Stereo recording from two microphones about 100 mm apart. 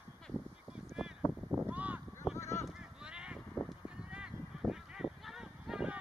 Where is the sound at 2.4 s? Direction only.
30° left (ahead or behind).